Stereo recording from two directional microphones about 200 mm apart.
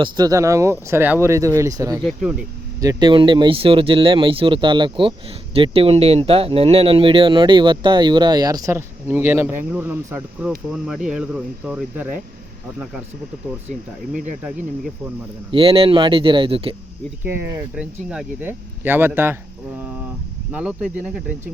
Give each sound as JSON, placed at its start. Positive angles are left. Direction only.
{"t": 0.0, "sound": "speech", "side_deg": -20}
{"t": 13.7, "sound": "speech", "side_deg": -40}
{"t": 15.5, "sound": "speech", "side_deg": -30}
{"t": 17.2, "sound": "speech", "side_deg": -10}
{"t": 20.5, "sound": "speech", "side_deg": -5}